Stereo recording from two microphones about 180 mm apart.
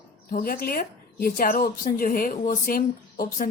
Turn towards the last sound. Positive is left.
turn(degrees=55)  # may be behind; listen again after turning